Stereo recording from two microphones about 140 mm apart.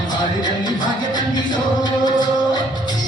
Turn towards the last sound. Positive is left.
turn(degrees=30)  # may be behind; listen again after turning